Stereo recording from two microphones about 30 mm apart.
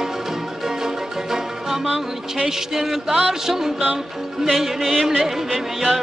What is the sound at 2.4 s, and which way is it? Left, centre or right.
A man's voice, centre.